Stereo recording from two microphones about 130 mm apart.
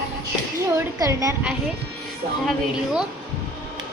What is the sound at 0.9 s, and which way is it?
Speech, 25° right (ahead or behind).